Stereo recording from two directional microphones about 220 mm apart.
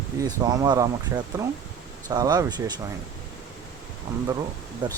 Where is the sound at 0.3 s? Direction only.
15° right (ahead or behind).